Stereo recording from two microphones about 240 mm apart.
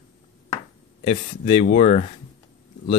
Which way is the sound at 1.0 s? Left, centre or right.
Left.